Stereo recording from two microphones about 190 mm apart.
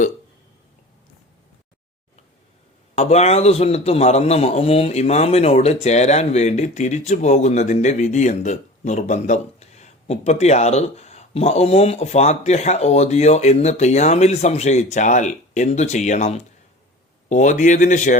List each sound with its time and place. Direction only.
2.9 s a man's voice: 35° left (ahead or behind)